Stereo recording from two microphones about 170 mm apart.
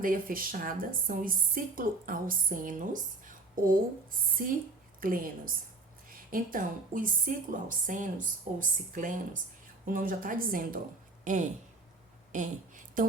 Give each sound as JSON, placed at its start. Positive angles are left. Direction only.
{"t": 0.0, "sound": "a woman's voice", "side_deg": -55}